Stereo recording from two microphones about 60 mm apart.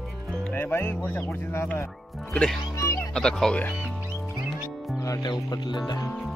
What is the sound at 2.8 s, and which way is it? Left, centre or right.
Music, left.